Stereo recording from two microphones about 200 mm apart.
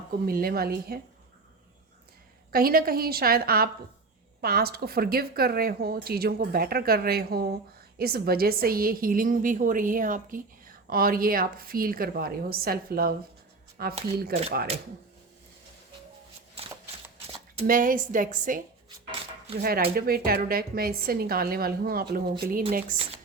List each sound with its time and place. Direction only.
0.3 s a woman's voice: 50° right (ahead or behind)
2.5 s a woman's voice: 45° right (ahead or behind)
17.7 s a woman's voice: 45° right (ahead or behind)
19.6 s a woman's voice: 50° right (ahead or behind)